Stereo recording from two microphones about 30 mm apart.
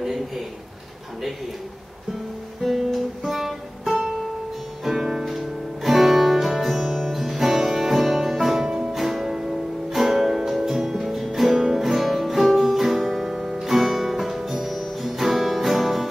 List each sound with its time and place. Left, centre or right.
2.6 s guitar: centre
4.8 s music: centre